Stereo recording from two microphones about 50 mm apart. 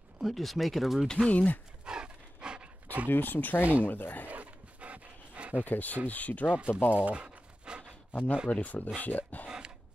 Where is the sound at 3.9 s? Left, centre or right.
Left.